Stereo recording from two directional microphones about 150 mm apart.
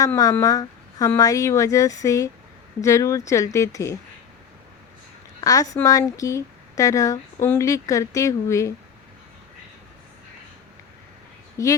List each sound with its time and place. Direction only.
0.0 s a woman's voice: 25° left (ahead or behind)
5.4 s a woman's voice: 20° left (ahead or behind)
11.5 s speech: 20° left (ahead or behind)